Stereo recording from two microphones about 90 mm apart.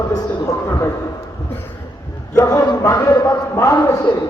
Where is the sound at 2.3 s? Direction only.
35° left (ahead or behind).